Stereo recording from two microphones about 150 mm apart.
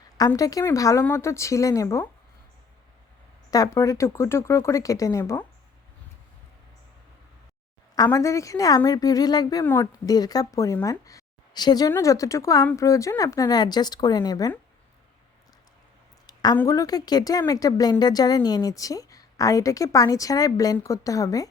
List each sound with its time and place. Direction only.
0.3 s a woman's voice: 25° left (ahead or behind)
3.5 s a woman's voice: 20° left (ahead or behind)
7.9 s a woman's voice: 25° left (ahead or behind)
16.2 s a sound: 25° left (ahead or behind)
16.6 s a woman's voice: 20° left (ahead or behind)